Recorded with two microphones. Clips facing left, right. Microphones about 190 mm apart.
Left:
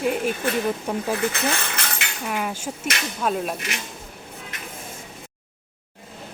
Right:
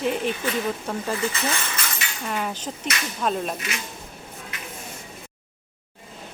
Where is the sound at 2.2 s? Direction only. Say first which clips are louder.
Left 1 dB; 5° left (ahead or behind).